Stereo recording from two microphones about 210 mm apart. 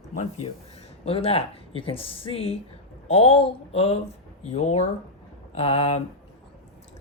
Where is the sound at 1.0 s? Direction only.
30° left (ahead or behind).